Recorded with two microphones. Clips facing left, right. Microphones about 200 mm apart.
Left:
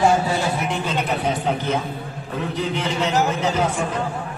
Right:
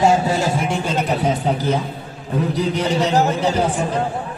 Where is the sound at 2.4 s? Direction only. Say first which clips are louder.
Right 5 dB; 40° right (ahead or behind).